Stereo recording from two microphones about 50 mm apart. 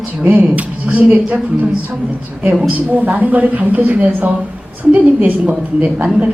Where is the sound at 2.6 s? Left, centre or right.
Right.